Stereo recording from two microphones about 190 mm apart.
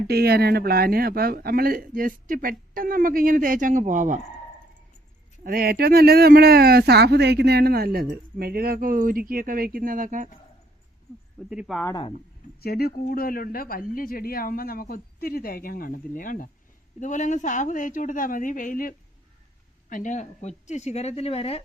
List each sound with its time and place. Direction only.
0.1 s speech: 55° right (ahead or behind)
5.4 s speech: 50° right (ahead or behind)
11.4 s speech: 5° right (ahead or behind)
11.9 s speech: 25° left (ahead or behind)
12.5 s speech: 55° left (ahead or behind); by 21.6 s 30° left (ahead or behind)